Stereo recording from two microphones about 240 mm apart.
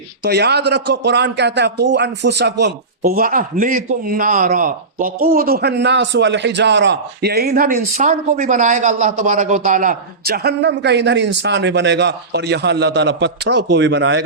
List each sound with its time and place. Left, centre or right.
0.3 s a man's voice: right